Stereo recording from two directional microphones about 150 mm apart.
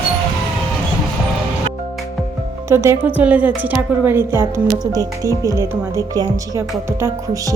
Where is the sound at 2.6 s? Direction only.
15° right (ahead or behind).